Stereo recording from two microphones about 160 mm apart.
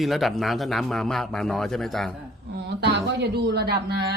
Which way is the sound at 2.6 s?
90° right.